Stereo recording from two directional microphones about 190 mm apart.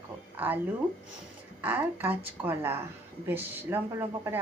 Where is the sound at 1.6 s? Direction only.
10° right (ahead or behind).